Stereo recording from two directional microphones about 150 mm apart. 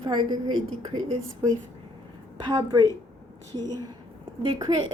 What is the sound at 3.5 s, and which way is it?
A woman's voice, 25° right (ahead or behind).